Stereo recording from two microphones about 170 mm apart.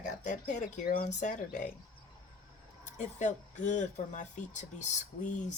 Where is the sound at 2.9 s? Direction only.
45° left (ahead or behind).